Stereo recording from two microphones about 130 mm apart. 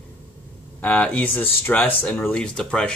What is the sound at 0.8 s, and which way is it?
Speech, 10° left (ahead or behind).